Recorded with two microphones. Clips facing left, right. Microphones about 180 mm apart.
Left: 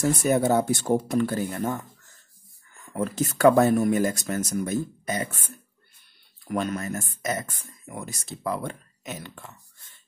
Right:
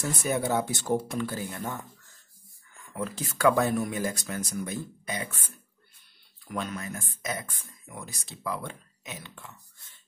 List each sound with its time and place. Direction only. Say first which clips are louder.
0.0 s speech: left 7 dB; 45° left (ahead or behind)
2.9 s speech: left 7 dB; 45° left (ahead or behind)
6.5 s speech: left 6 dB; 45° left (ahead or behind)